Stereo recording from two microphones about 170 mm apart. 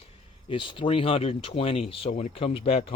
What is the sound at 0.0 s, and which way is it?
Speech, 30° left (ahead or behind).